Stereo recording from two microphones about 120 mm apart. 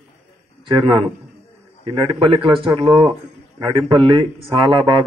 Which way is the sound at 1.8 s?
45° right (ahead or behind).